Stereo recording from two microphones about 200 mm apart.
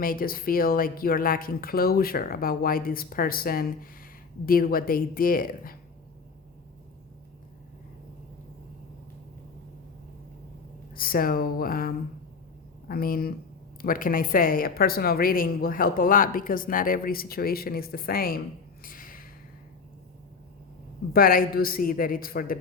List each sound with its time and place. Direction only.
0.0 s a woman's voice: 45° left (ahead or behind)
10.9 s a woman's voice: 45° left (ahead or behind)
21.1 s a woman's voice: 45° left (ahead or behind)